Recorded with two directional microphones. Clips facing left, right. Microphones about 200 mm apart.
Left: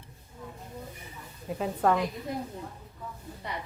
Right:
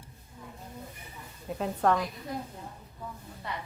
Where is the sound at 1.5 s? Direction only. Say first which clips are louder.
Left 1 dB; centre (ahead or behind).